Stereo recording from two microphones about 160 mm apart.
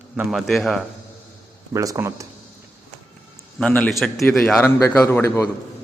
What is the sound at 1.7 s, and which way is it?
Speech, 20° right (ahead or behind).